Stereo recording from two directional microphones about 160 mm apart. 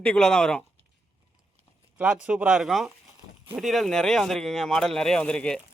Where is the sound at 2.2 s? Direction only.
5° right (ahead or behind).